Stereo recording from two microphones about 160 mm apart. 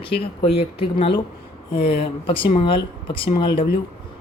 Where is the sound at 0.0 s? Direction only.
35° left (ahead or behind).